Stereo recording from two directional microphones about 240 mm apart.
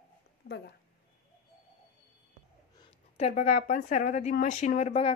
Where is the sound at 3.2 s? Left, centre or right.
Left.